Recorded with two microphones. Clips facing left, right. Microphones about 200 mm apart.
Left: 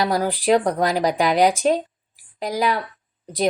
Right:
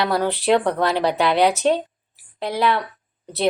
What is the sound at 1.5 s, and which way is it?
Speech, 10° left (ahead or behind).